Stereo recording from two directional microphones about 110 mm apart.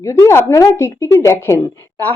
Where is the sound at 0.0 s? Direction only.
25° left (ahead or behind).